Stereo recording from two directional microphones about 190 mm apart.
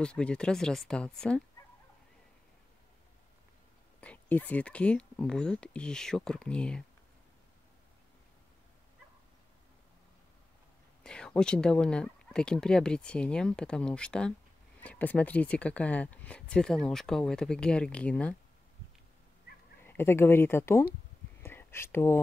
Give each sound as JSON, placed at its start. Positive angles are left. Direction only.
{"t": 0.0, "sound": "speech", "side_deg": 5}
{"t": 4.0, "sound": "speech", "side_deg": 10}
{"t": 11.1, "sound": "speech", "side_deg": 5}
{"t": 19.5, "sound": "a sound", "side_deg": 55}
{"t": 19.8, "sound": "speech", "side_deg": 10}
{"t": 21.4, "sound": "a sound", "side_deg": 10}